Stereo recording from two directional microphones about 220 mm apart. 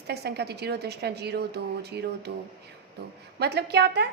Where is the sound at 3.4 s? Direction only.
50° right (ahead or behind).